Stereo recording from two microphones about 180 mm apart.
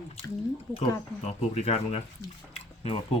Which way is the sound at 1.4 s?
35° left (ahead or behind).